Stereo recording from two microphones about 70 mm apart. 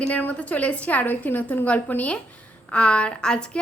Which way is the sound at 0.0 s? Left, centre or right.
Left.